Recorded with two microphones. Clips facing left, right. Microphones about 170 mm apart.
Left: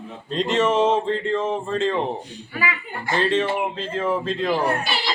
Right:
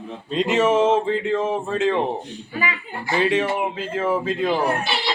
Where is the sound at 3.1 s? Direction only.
10° right (ahead or behind).